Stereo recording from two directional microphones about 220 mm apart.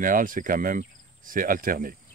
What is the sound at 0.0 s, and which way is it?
Speech, 40° right (ahead or behind).